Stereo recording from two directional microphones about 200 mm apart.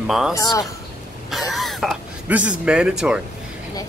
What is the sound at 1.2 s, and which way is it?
Speech, centre (ahead or behind).